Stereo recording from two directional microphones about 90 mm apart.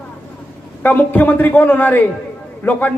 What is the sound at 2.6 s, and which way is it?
Speech, 25° left (ahead or behind).